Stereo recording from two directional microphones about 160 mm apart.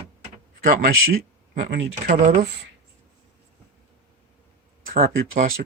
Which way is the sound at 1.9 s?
50° right (ahead or behind).